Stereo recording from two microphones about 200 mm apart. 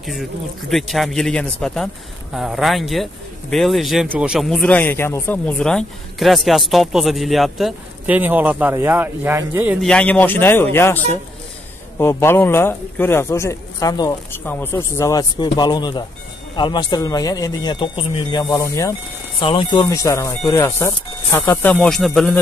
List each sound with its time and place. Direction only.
0.0 s speech: centre (ahead or behind)
9.8 s speech: 5° left (ahead or behind)
12.0 s speech: 10° left (ahead or behind)